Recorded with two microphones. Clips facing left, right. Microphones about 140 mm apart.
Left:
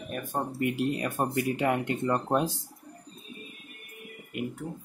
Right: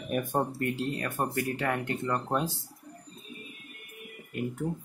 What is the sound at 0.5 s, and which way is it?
Speech, 15° left (ahead or behind).